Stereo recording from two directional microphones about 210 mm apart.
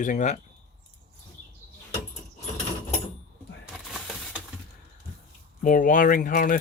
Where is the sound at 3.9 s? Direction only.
Centre (ahead or behind).